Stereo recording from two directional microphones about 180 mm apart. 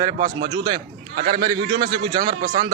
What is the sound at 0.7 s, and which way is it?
Speech, 35° right (ahead or behind).